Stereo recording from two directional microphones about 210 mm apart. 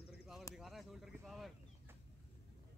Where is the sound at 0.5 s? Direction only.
Centre (ahead or behind).